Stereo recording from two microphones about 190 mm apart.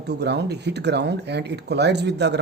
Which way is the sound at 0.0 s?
60° right (ahead or behind).